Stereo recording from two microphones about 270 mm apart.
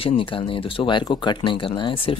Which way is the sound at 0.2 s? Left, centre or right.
Centre.